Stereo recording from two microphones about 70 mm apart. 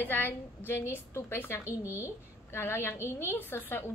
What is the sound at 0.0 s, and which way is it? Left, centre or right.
A woman's voice, left.